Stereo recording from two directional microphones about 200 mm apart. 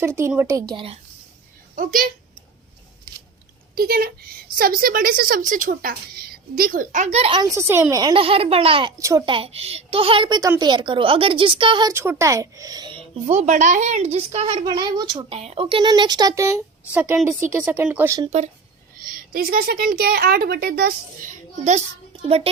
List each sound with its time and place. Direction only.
0.0 s speech: 15° right (ahead or behind)
1.7 s speech: 45° right (ahead or behind)
3.8 s a woman's voice: 50° right (ahead or behind); by 7.4 s 30° right (ahead or behind)
7.4 s a woman's voice: 15° right (ahead or behind)
9.0 s a woman's voice: 15° right (ahead or behind)
13.2 s a woman's voice: 35° right (ahead or behind); by 18.2 s 10° right (ahead or behind)
19.3 s a woman's voice: 45° right (ahead or behind); by 22.4 s 30° right (ahead or behind)